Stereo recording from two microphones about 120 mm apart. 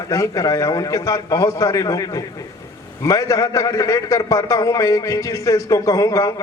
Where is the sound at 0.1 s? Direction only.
25° left (ahead or behind).